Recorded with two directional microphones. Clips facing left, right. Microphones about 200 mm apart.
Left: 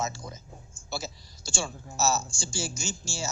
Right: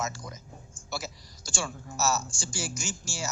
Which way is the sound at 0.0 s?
25° left (ahead or behind).